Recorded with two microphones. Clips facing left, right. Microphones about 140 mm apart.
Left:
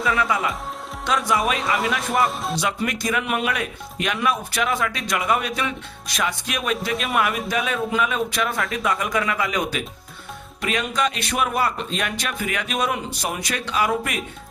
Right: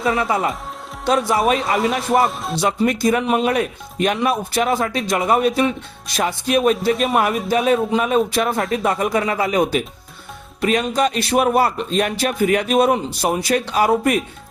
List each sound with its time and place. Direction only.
0.0 s speech: 30° right (ahead or behind)
1.5 s speech: centre (ahead or behind)
2.6 s speech: 35° right (ahead or behind)